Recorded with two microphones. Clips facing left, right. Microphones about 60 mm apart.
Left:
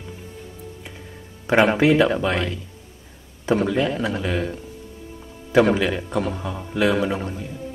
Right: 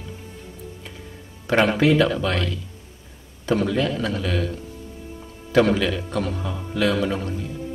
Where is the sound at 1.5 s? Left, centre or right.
Centre.